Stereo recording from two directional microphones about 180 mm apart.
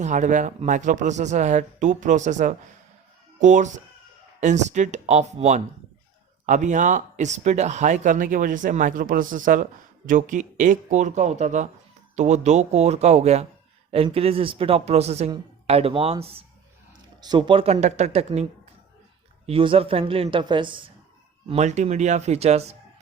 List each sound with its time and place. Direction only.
0.0 s speech: 45° right (ahead or behind)
17.2 s speech: 25° right (ahead or behind)
19.5 s speech: 30° right (ahead or behind)
21.5 s speech: 40° right (ahead or behind)